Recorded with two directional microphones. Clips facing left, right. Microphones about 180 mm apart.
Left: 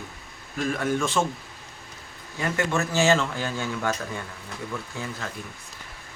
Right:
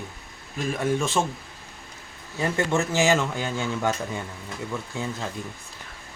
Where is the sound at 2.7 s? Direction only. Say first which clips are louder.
Even; 15° right (ahead or behind).